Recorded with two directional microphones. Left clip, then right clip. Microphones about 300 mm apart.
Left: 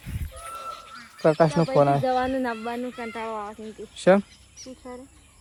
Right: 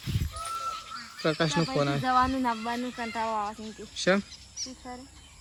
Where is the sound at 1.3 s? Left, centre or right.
Centre.